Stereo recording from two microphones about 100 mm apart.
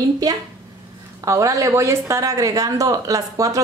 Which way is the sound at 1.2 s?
30° right (ahead or behind).